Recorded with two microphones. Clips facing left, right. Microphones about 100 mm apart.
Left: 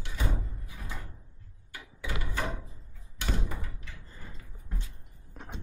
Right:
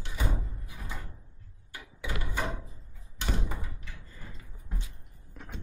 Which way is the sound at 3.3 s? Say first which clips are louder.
Even; 10° right (ahead or behind).